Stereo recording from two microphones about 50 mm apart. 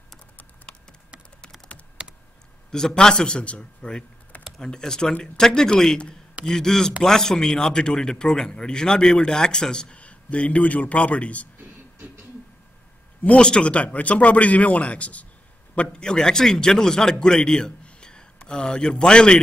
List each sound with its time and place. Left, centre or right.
2.0 s computer keyboard: centre
2.7 s a man's voice: centre
9.9 s speech: left
13.2 s speech: left
15.9 s a man's voice: centre